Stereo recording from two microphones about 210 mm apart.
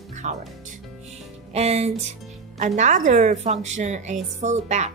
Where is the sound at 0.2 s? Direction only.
35° right (ahead or behind).